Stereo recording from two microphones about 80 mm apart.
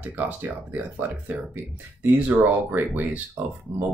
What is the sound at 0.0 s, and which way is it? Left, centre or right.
Speech, right.